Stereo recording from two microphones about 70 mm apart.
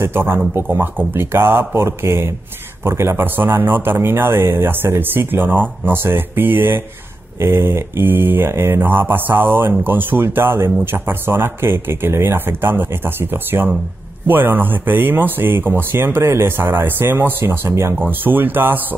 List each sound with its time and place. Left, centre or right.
0.0 s speech: right